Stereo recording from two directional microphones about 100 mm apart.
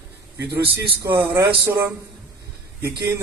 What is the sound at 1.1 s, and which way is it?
Speech, 25° right (ahead or behind).